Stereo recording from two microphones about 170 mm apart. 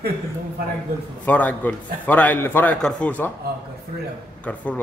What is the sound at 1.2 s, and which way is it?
Speech, 10° left (ahead or behind).